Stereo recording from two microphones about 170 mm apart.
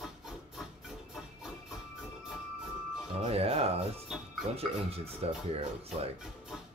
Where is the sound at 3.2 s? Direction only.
35° right (ahead or behind).